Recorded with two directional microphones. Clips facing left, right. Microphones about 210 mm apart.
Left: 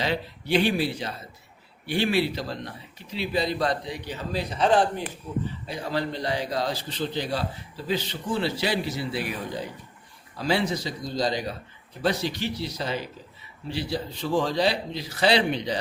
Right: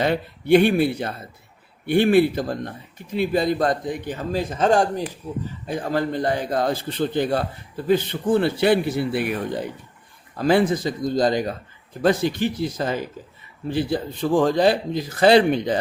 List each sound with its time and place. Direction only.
0.0 s a man's voice: 55° right (ahead or behind)